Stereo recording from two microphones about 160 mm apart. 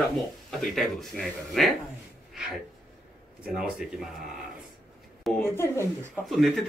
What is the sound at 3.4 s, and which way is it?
Speech, 5° right (ahead or behind).